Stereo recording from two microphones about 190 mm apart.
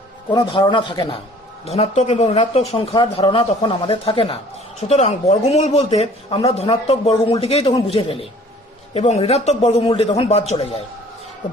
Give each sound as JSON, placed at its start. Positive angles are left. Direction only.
{"t": 0.3, "sound": "a man's voice", "side_deg": 25}